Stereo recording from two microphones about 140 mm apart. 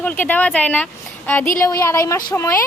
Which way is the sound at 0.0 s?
10° left (ahead or behind).